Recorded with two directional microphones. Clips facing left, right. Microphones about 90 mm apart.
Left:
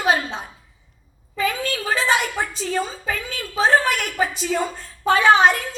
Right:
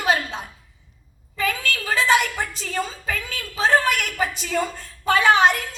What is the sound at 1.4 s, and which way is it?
A woman's voice, 30° left (ahead or behind).